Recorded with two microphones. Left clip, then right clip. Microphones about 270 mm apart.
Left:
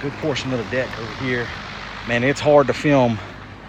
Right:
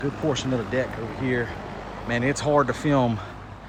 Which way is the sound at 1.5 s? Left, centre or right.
Right.